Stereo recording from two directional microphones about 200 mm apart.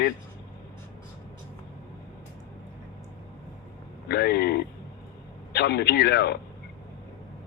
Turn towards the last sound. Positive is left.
turn(degrees=55)  # may be behind; listen again after turning